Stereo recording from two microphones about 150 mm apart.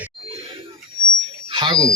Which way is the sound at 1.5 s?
35° right (ahead or behind).